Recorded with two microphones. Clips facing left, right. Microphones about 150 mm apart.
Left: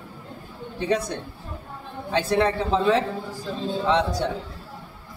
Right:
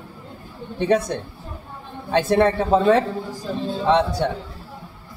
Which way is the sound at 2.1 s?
50° right (ahead or behind).